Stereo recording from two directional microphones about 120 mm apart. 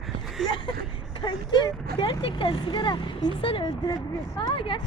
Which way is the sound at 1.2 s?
40° left (ahead or behind).